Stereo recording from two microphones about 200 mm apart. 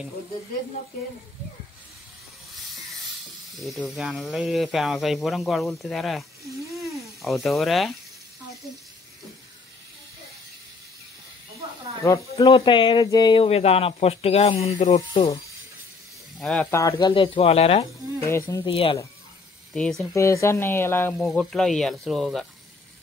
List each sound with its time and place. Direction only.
3.5 s speech: centre (ahead or behind)
6.7 s sizzle: centre (ahead or behind)
12.0 s speech: 15° left (ahead or behind); by 15.2 s 30° left (ahead or behind)
16.3 s speech: 5° left (ahead or behind)
16.8 s speech: 25° left (ahead or behind)
18.2 s speech: 15° left (ahead or behind)
18.7 s speech: 25° left (ahead or behind)
19.7 s speech: centre (ahead or behind)
20.2 s speech: 15° left (ahead or behind)